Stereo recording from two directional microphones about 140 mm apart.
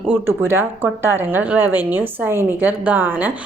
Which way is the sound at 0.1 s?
15° right (ahead or behind).